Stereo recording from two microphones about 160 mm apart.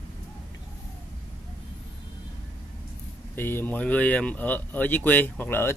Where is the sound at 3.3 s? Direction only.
15° left (ahead or behind).